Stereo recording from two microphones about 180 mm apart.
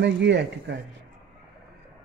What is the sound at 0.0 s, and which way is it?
Speech, 75° right (ahead or behind).